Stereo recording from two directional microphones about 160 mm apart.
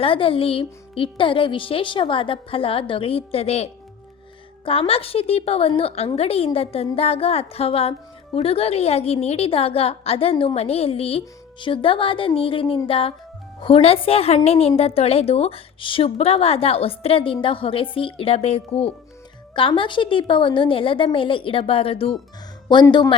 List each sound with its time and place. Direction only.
0.0 s a woman's voice: 35° left (ahead or behind)